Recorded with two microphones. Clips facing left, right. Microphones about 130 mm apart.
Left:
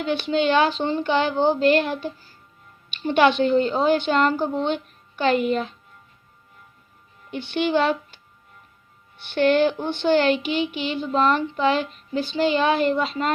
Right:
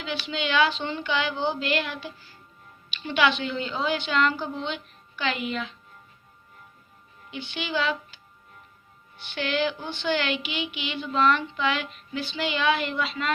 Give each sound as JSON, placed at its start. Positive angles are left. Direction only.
{"t": 0.0, "sound": "a woman's voice", "side_deg": 50}
{"t": 7.3, "sound": "speech", "side_deg": 55}
{"t": 9.3, "sound": "speech", "side_deg": 50}